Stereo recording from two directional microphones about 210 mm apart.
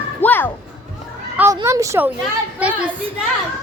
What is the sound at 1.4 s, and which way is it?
A child's voice, 15° right (ahead or behind).